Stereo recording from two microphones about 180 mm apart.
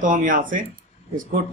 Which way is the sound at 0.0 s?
45° right (ahead or behind).